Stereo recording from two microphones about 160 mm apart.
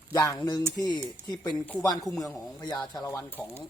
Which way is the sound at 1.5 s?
10° left (ahead or behind).